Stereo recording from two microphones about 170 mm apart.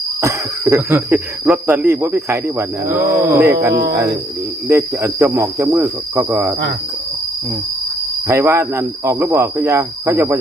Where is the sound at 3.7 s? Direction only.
75° right (ahead or behind).